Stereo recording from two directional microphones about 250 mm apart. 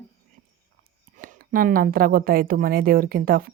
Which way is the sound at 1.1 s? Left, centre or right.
Right.